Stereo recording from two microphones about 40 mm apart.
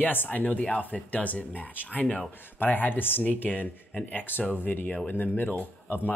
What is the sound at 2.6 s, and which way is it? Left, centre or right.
Speech, left.